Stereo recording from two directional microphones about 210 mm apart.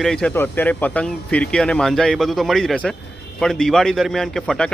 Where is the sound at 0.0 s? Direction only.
5° left (ahead or behind).